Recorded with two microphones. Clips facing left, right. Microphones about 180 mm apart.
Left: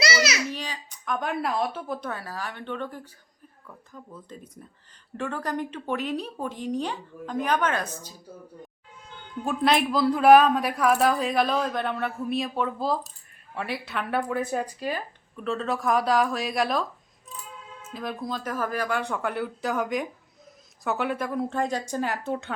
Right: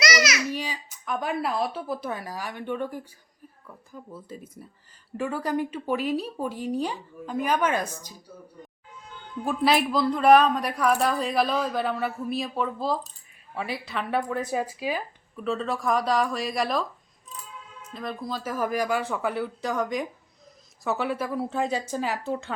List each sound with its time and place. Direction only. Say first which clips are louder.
0.0 s babbling: even; 30° left (ahead or behind)
0.5 s a woman's voice: right 3 dB; 10° right (ahead or behind)
9.4 s speech: even; centre (ahead or behind)
17.9 s speech: left 1 dB; centre (ahead or behind)